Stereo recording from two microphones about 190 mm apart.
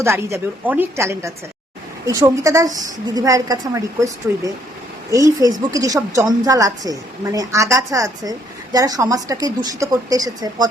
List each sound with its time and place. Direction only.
0.0 s a woman's voice: 15° right (ahead or behind)